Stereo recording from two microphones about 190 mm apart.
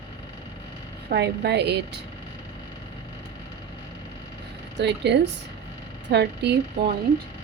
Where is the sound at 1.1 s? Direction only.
60° right (ahead or behind).